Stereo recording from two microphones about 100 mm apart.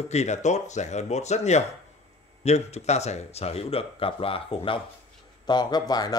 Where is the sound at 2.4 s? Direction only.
90° left; by 4.8 s 65° left (ahead or behind).